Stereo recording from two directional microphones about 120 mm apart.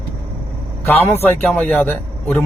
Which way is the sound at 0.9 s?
15° left (ahead or behind).